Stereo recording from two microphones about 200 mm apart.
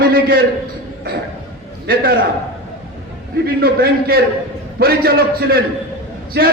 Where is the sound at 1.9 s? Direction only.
50° right (ahead or behind).